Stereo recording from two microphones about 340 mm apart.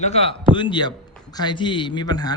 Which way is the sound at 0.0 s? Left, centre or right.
Centre.